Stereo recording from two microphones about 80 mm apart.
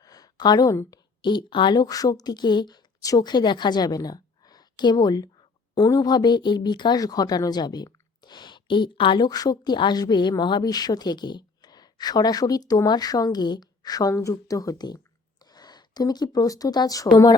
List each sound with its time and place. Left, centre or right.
0.0 s a sound: left
1.2 s a woman's voice: left
9.7 s a woman's voice: left
14.1 s speech: left